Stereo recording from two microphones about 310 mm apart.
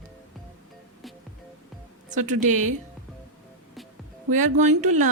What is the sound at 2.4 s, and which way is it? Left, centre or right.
Speech, right.